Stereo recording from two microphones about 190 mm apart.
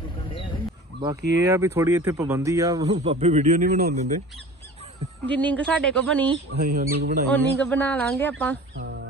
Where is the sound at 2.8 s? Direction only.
35° right (ahead or behind).